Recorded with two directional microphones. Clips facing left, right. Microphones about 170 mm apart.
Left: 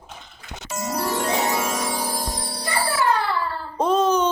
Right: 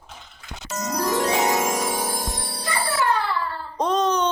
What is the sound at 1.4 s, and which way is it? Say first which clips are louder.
Music: right 2 dB; 15° right (ahead or behind).